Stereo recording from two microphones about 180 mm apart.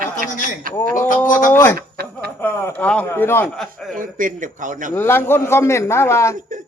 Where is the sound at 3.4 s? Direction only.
Centre (ahead or behind).